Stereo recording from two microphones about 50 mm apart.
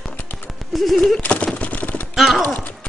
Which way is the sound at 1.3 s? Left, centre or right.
Left.